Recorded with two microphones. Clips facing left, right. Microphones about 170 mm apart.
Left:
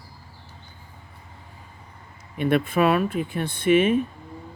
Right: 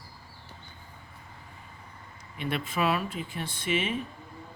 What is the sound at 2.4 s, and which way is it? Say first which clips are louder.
Speech: left 9 dB; 55° left (ahead or behind).